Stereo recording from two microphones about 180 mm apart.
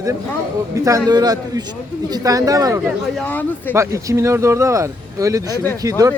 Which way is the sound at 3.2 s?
10° left (ahead or behind).